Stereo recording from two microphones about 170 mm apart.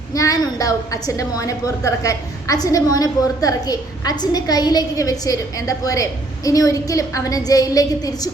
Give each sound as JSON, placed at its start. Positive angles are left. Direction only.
{"t": 0.1, "sound": "a woman's voice", "side_deg": 20}